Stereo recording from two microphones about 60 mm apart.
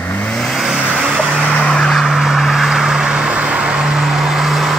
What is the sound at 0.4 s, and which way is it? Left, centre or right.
Vehicle, centre.